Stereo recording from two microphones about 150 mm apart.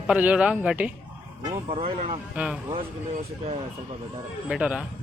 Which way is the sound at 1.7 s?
40° right (ahead or behind).